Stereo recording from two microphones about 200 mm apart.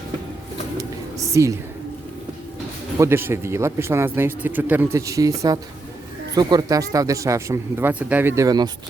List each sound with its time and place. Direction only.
1.3 s a woman's voice: 15° right (ahead or behind)
3.0 s a man's voice: 10° right (ahead or behind)